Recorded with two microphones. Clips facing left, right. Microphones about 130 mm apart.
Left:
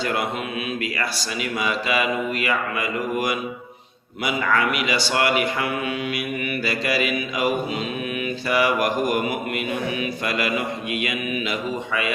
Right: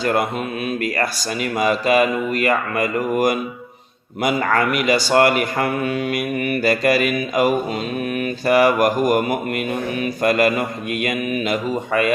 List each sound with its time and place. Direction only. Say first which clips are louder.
0.0 s a man's voice: right 5 dB; 45° right (ahead or behind)